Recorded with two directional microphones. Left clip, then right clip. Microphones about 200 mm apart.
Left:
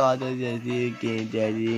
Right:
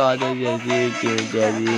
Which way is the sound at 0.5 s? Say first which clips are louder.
Right 8 dB; 50° right (ahead or behind).